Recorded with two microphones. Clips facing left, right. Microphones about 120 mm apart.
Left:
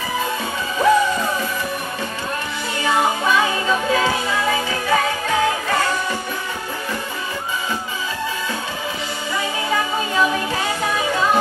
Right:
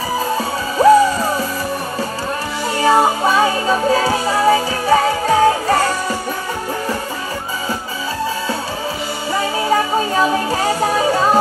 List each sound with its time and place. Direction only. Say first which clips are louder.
0.8 s music: right 6 dB; 35° right (ahead or behind)
2.8 s music: right 6 dB; 35° right (ahead or behind)
9.3 s music: right 6 dB; 35° right (ahead or behind)